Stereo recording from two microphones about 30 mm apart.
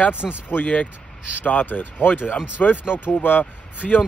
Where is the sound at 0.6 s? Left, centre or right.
Left.